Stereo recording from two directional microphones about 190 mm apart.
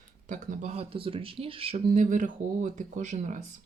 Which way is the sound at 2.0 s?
45° right (ahead or behind).